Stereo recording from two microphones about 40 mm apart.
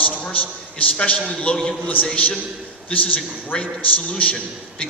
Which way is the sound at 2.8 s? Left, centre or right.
Left.